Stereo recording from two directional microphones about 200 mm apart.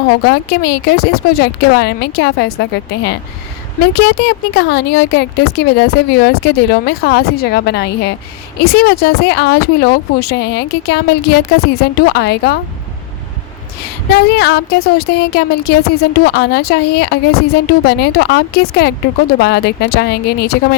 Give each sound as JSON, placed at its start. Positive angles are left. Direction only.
{"t": 0.3, "sound": "speech", "side_deg": 55}
{"t": 3.9, "sound": "speech", "side_deg": 55}
{"t": 14.1, "sound": "speech", "side_deg": 55}